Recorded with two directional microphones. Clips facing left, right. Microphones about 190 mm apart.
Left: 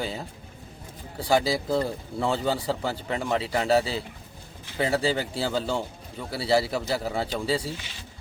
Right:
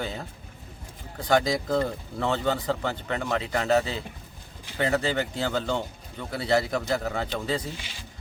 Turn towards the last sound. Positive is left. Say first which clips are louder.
# left 2 dB
turn(degrees=10)  # may be behind; listen again after turning